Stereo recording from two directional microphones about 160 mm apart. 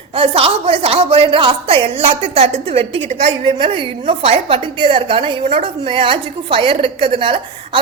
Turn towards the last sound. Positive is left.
turn(degrees=-35)  # may be behind; listen again after turning